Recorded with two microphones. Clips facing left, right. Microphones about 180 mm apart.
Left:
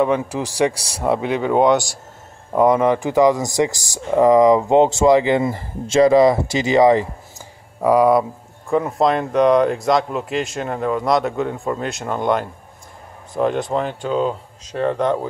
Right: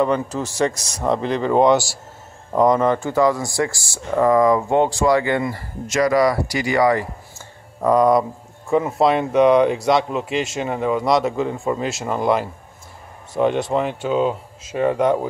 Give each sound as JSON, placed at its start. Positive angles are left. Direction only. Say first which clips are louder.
{"t": 0.0, "sound": "speech", "louder": "left 1 dB", "side_deg": 5}
{"t": 7.8, "sound": "speech", "louder": "left 1 dB", "side_deg": 10}